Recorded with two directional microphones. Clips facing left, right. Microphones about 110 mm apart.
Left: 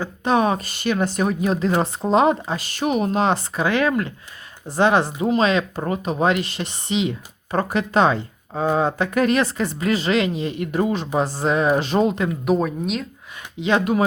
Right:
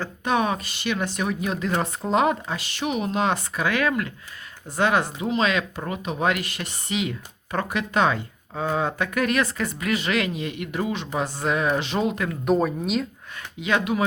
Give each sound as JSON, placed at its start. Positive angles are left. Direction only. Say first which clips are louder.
{"t": 0.3, "sound": "speech", "louder": "left 4 dB", "side_deg": 35}
{"t": 2.6, "sound": "speech", "louder": "left 5 dB", "side_deg": 40}
{"t": 12.5, "sound": "speech", "louder": "even", "side_deg": 0}
{"t": 13.6, "sound": "speech", "louder": "left 4 dB", "side_deg": 30}